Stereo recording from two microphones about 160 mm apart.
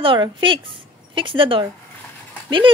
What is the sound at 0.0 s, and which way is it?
A child's voice, 30° right (ahead or behind).